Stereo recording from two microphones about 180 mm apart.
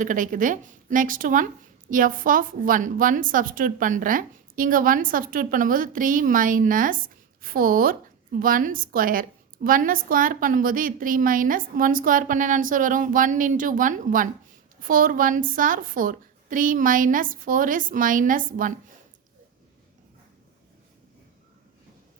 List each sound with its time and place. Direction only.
0.0 s a woman's voice: 45° right (ahead or behind)